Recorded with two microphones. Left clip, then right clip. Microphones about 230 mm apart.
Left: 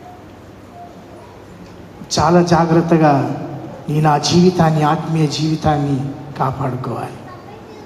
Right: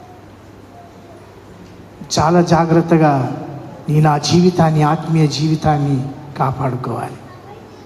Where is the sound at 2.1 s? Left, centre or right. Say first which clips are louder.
Even; right.